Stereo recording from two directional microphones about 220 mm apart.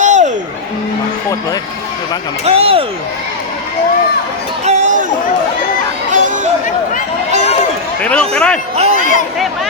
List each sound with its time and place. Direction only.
0.0 s a sound: 35° right (ahead or behind)
2.4 s a man's voice: 25° right (ahead or behind)
4.6 s chatter: 35° right (ahead or behind)
6.1 s chatter: 35° right (ahead or behind)
8.1 s a man's voice: 5° left (ahead or behind)
8.7 s a man's voice: 30° right (ahead or behind)